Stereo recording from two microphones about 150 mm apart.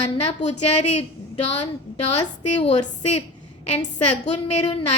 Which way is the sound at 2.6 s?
45° left (ahead or behind).